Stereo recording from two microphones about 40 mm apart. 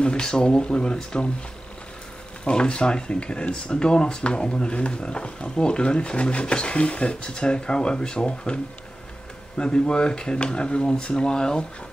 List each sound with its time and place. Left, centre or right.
0.0 s speech: left
2.4 s speech: left
9.6 s speech: left